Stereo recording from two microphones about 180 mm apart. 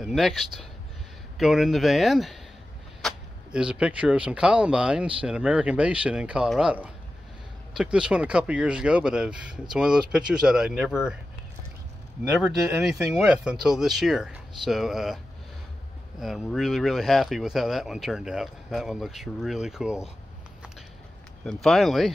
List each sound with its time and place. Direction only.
0.0 s speech: centre (ahead or behind)
12.4 s speech: 5° right (ahead or behind)
16.2 s speech: centre (ahead or behind)
21.5 s speech: centre (ahead or behind)